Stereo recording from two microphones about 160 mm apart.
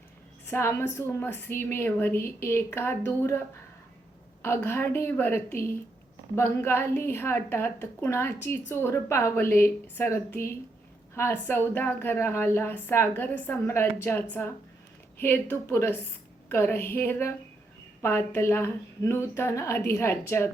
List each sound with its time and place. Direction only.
0.4 s a woman's voice: 15° left (ahead or behind)
4.4 s a woman's voice: 15° left (ahead or behind)